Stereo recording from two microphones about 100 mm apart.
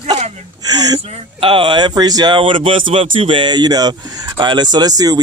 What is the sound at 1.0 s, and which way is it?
Speech, 85° right.